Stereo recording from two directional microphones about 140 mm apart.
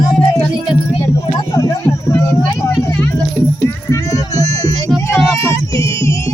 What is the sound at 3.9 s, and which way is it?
Music, 25° left (ahead or behind).